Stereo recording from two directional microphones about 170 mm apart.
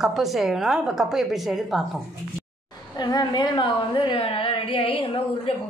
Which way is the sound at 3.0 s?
25° left (ahead or behind).